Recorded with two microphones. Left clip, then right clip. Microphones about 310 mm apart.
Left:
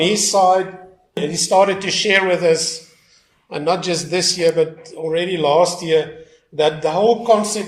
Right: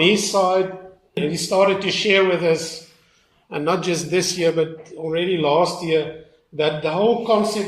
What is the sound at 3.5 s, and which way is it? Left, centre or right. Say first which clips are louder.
A man's voice: left 2 dB; centre.